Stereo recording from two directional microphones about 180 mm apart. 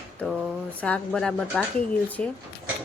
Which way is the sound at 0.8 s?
5° left (ahead or behind).